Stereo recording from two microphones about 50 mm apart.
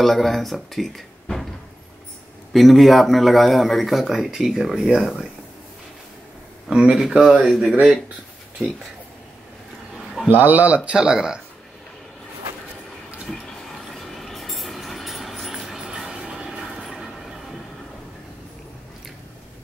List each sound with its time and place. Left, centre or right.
0.0 s speech: centre
2.5 s speech: centre
6.7 s speech: centre
7.7 s speech: right
10.3 s speech: right
10.9 s speech: centre
13.9 s train: centre
15.9 s vehicle: centre
16.6 s train: centre